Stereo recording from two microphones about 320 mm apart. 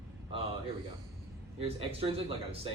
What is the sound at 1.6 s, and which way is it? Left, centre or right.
A man's voice, centre.